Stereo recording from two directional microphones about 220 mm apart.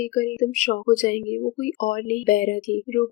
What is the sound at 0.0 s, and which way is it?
Speech, 40° left (ahead or behind).